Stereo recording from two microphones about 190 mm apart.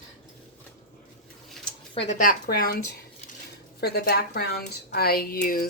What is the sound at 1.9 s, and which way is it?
Speech, 35° left (ahead or behind).